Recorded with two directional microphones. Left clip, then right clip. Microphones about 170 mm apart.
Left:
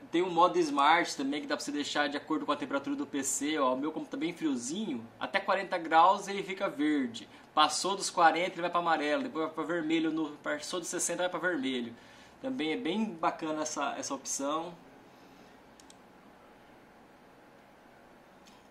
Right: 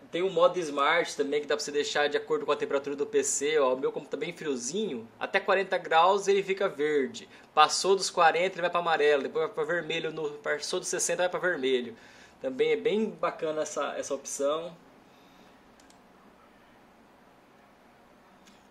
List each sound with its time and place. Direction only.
0.1 s speech: 15° right (ahead or behind)